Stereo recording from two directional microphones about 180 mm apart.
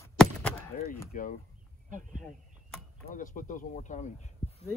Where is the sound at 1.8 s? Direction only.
45° right (ahead or behind).